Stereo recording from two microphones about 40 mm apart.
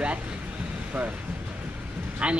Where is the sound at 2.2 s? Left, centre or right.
Right.